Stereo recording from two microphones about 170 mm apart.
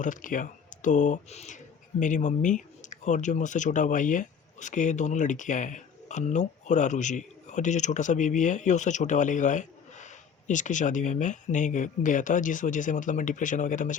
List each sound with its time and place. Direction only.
0.0 s speech: 50° left (ahead or behind)